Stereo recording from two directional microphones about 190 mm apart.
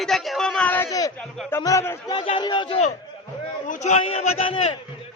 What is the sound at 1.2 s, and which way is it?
Speech, 5° left (ahead or behind).